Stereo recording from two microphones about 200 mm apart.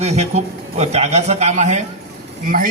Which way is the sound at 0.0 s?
35° right (ahead or behind).